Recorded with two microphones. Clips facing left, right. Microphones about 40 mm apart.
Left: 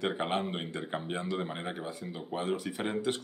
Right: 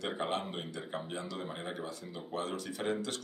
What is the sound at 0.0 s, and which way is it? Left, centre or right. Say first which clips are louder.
Speech: left 4 dB; left.